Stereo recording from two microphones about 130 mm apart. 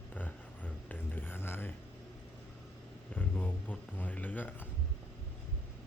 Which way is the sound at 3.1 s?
15° left (ahead or behind).